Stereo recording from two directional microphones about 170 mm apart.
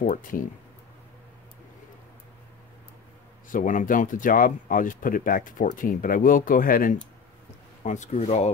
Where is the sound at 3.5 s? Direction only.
50° left (ahead or behind).